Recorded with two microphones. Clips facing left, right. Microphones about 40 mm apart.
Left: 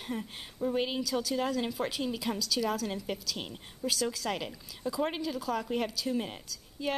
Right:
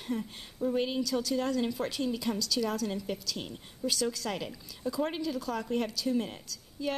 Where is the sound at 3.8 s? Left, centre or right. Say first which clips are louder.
Even; centre.